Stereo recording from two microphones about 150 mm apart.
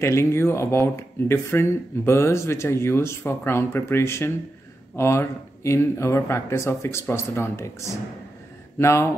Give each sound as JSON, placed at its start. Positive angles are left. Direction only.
{"t": 0.0, "sound": "speech", "side_deg": 20}